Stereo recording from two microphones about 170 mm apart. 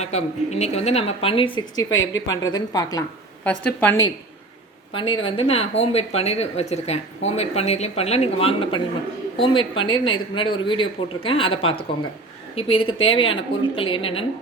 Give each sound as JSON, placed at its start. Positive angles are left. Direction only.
{"t": 0.0, "sound": "speech", "side_deg": 40}
{"t": 1.5, "sound": "speech", "side_deg": 20}
{"t": 1.9, "sound": "a woman's voice", "side_deg": 90}
{"t": 2.3, "sound": "speech", "side_deg": 25}
{"t": 3.4, "sound": "a woman's voice", "side_deg": 10}
{"t": 4.9, "sound": "speech", "side_deg": 30}